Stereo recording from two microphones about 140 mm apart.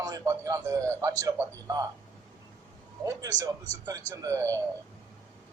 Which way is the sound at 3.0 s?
25° right (ahead or behind).